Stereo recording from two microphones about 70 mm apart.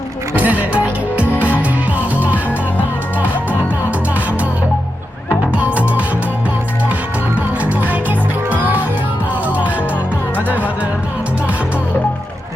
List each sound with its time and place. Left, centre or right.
0.3 s music: right
5.5 s music: right
8.4 s music: right